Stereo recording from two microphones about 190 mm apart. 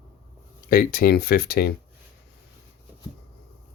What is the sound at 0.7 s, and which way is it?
Speech, 50° left (ahead or behind).